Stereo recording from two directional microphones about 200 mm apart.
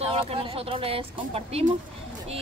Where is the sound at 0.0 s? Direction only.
30° right (ahead or behind).